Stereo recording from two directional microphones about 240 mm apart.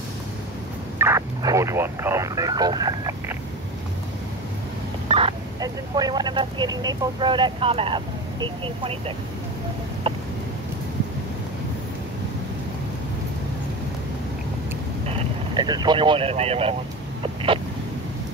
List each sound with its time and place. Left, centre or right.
0.9 s a sound: centre
5.0 s speech: right
15.0 s speech: right
17.2 s vehicle: right